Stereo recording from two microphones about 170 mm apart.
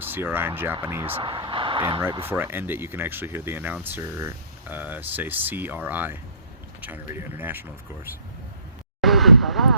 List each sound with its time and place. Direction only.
0.0 s speech: 10° right (ahead or behind)
1.1 s speech: 25° right (ahead or behind)
2.2 s speech: 10° right (ahead or behind)
9.0 s vehicle: centre (ahead or behind)